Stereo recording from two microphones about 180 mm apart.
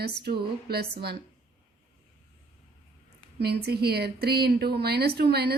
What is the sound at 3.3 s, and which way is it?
Speech, 65° right (ahead or behind).